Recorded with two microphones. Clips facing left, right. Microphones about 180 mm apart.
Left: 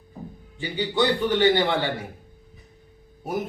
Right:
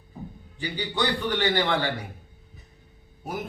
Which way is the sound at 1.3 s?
25° left (ahead or behind).